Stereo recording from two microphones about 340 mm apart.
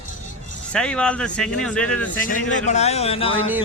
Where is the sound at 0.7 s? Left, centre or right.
Centre.